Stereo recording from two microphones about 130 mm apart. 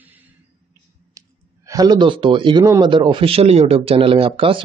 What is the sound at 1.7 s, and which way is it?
Speech, 30° right (ahead or behind).